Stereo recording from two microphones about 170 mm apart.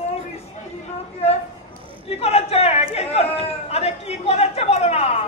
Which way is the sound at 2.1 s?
35° left (ahead or behind).